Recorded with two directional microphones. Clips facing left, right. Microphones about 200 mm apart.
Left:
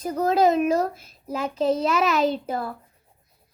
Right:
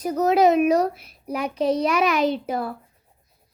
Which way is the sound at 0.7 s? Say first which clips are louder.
Right 3 dB; 25° left (ahead or behind).